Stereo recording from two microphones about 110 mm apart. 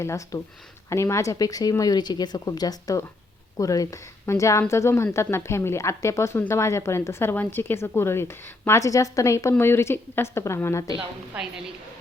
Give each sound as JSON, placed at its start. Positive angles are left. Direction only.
{"t": 0.0, "sound": "speech", "side_deg": 30}
{"t": 11.3, "sound": "a woman's voice", "side_deg": -10}